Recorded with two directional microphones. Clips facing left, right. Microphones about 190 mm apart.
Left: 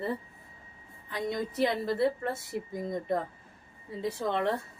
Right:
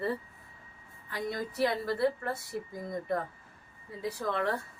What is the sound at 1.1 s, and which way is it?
A woman's voice, 20° left (ahead or behind).